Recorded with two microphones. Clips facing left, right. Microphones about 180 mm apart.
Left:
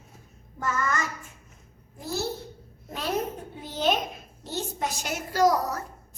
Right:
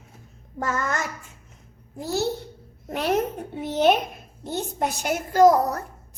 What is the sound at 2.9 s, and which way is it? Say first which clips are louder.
A woman's voice: right 6 dB; 65° right (ahead or behind).